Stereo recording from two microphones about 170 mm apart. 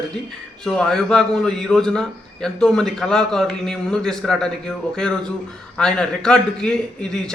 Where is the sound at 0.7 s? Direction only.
5° left (ahead or behind).